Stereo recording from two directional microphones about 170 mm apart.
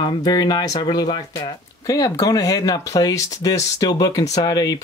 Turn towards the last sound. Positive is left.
turn(degrees=25)  # may be behind; listen again after turning